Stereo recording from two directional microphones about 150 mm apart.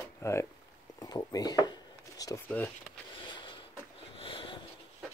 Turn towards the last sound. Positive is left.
turn(degrees=35)  # may be behind; listen again after turning